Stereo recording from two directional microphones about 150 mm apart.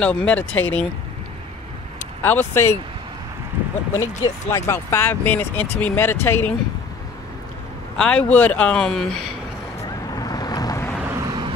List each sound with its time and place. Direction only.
0.0 s speech: 10° left (ahead or behind)
2.2 s speech: 15° left (ahead or behind)
4.0 s speech: 20° left (ahead or behind)
8.0 s speech: 10° left (ahead or behind)
10.1 s boat: 25° left (ahead or behind)
11.1 s vehicle: 20° right (ahead or behind)